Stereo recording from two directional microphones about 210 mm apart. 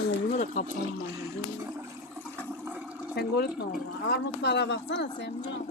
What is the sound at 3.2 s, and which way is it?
Speech, 50° left (ahead or behind).